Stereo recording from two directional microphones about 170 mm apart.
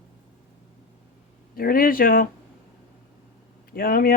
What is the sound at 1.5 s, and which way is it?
Speech, 60° left (ahead or behind).